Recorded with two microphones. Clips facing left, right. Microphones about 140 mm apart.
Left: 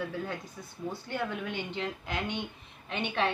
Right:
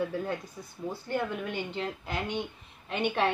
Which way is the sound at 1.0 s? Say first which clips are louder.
Right 4 dB; 40° right (ahead or behind).